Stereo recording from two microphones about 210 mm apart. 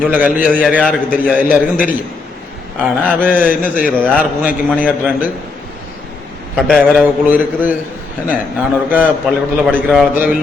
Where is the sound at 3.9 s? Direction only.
5° left (ahead or behind).